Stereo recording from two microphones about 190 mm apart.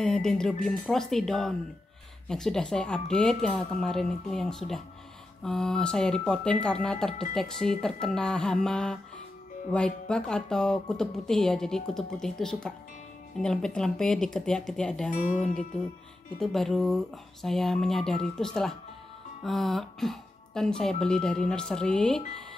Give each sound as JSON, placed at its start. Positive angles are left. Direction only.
{"t": 0.0, "sound": "speech", "side_deg": 5}
{"t": 15.0, "sound": "speech", "side_deg": 40}
{"t": 16.3, "sound": "speech", "side_deg": 0}